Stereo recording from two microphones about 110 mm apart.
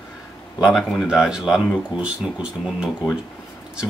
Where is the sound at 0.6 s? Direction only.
5° right (ahead or behind).